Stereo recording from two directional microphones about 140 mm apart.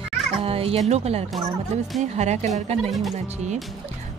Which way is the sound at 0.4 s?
45° right (ahead or behind).